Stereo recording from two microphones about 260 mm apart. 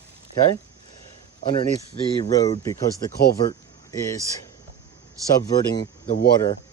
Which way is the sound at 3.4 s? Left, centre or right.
Centre.